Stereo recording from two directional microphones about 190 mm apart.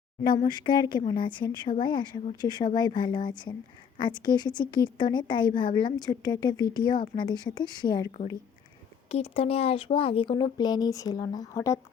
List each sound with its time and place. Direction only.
0.2 s speech: 20° left (ahead or behind)
9.0 s speech: 30° left (ahead or behind); by 11.8 s 15° left (ahead or behind)